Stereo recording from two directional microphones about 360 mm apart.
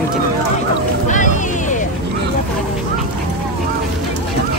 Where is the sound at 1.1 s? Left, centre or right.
Left.